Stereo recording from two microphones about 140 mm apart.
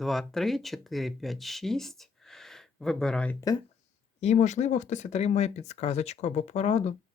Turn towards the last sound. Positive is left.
turn(degrees=50)  # may be behind; listen again after turning